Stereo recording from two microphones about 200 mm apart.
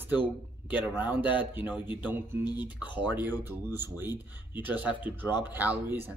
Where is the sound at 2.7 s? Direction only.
10° right (ahead or behind).